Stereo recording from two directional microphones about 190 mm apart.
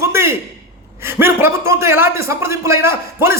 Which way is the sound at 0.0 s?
15° right (ahead or behind).